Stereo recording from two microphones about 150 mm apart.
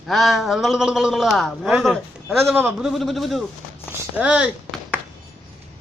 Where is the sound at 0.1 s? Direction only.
Centre (ahead or behind).